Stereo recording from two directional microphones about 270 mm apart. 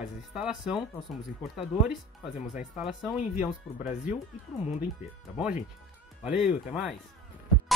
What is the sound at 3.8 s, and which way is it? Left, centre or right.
Speech, left.